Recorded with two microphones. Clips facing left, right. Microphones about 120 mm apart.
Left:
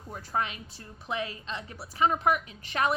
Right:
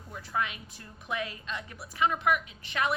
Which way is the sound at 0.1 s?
40° left (ahead or behind).